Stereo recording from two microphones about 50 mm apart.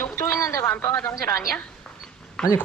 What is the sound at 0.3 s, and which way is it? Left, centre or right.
Radio, left.